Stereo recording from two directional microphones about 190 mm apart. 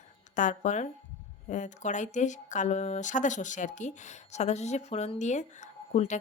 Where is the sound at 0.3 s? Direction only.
40° left (ahead or behind).